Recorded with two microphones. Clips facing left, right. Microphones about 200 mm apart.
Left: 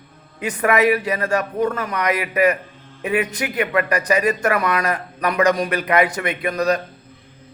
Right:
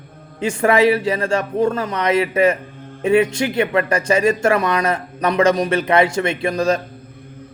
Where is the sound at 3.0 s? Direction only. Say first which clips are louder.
Right 6 dB; 25° right (ahead or behind).